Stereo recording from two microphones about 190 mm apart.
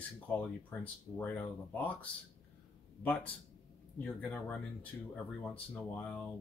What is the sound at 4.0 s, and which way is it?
Speech, 5° left (ahead or behind).